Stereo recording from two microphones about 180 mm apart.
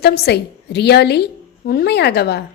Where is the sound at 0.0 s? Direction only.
65° left (ahead or behind).